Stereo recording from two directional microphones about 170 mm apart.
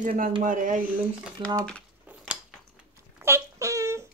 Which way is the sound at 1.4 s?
30° right (ahead or behind).